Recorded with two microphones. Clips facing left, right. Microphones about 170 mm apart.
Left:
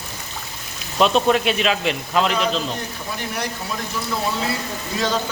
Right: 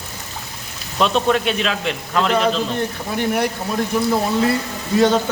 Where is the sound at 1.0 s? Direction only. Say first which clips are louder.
Left 1 dB; 5° left (ahead or behind).